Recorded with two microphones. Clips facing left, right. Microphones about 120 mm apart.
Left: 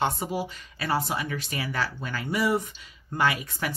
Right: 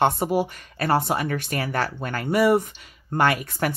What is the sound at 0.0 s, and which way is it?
Speech, 60° right (ahead or behind).